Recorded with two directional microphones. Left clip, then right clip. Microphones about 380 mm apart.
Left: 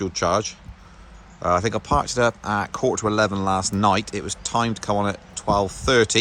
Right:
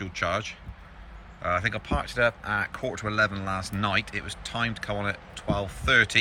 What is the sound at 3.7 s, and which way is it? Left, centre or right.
Speech, centre.